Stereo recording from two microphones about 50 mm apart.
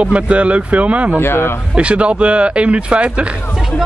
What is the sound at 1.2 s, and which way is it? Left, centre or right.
Speech, left.